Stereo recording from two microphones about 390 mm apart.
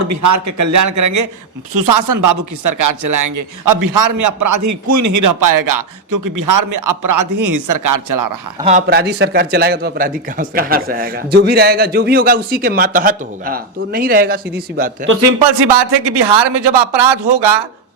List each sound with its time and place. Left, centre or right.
0.1 s speech: right
1.7 s speech: right
8.6 s a man's voice: right
15.6 s speech: right